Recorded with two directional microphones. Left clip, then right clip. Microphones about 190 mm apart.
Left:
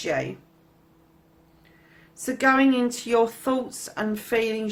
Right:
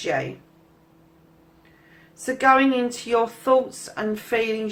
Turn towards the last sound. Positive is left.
turn(degrees=35)  # may be behind; listen again after turning